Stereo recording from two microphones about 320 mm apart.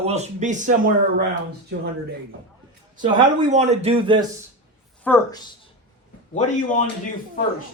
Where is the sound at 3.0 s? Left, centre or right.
Right.